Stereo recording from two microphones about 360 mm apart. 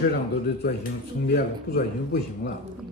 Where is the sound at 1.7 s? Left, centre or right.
Left.